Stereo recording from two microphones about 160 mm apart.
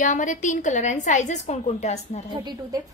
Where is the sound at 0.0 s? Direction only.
50° left (ahead or behind).